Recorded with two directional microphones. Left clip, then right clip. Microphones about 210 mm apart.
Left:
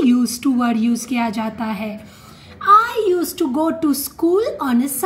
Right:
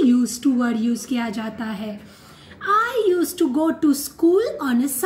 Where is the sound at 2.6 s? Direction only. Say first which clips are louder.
Left 6 dB; 15° left (ahead or behind).